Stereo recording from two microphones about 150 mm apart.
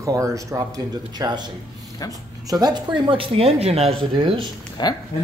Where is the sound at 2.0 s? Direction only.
25° left (ahead or behind).